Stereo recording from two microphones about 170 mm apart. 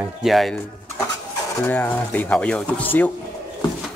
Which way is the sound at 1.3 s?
15° left (ahead or behind).